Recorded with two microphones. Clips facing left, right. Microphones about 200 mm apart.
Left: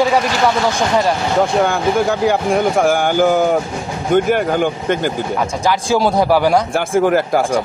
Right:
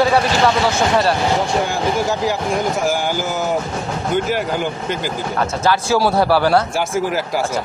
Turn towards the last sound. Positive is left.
turn(degrees=55)  # may be behind; listen again after turning